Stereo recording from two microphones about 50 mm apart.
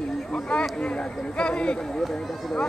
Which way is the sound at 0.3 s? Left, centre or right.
Centre.